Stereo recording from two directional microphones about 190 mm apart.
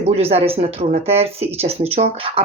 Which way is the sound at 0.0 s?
30° right (ahead or behind).